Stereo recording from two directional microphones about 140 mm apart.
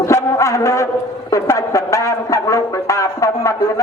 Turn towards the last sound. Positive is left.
turn(degrees=25)  # may be behind; listen again after turning